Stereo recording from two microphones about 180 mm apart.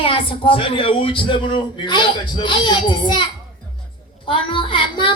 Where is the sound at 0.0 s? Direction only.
30° left (ahead or behind).